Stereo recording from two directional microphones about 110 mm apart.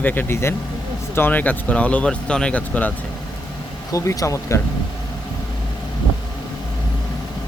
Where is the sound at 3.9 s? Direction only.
30° left (ahead or behind).